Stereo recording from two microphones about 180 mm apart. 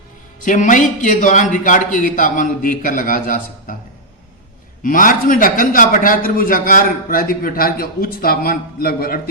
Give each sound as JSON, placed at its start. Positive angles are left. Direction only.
{"t": 0.4, "sound": "a man's voice", "side_deg": 45}
{"t": 4.8, "sound": "a man's voice", "side_deg": 50}